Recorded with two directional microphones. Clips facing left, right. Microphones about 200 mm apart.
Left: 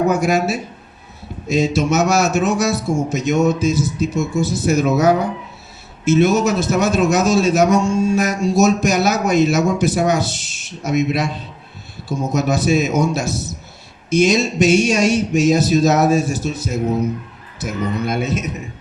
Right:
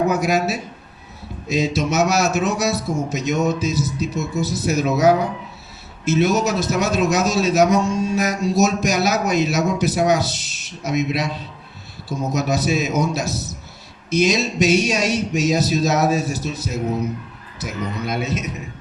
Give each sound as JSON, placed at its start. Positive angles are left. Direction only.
{"t": 0.1, "sound": "a man's voice", "side_deg": 50}
{"t": 17.6, "sound": "a man's voice", "side_deg": 50}